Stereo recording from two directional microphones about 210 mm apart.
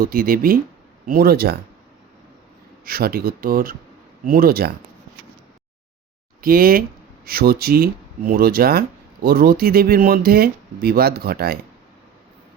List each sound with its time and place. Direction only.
0.0 s speech: 45° right (ahead or behind)
2.8 s speech: 45° right (ahead or behind)
6.4 s speech: 45° right (ahead or behind)